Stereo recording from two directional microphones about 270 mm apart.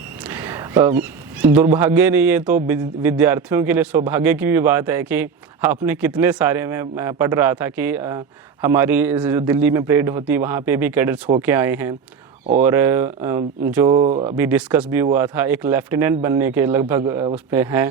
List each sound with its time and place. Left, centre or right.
0.3 s a man's voice: centre
3.3 s speech: right
3.7 s speech: centre
13.9 s speech: centre
14.3 s speech: centre